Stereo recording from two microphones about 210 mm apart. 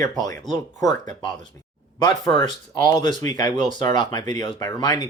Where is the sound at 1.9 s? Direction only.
20° left (ahead or behind).